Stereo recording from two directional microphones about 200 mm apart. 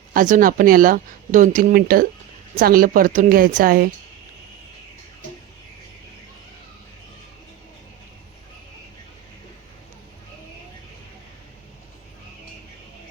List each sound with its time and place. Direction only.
0.1 s speech: 45° right (ahead or behind)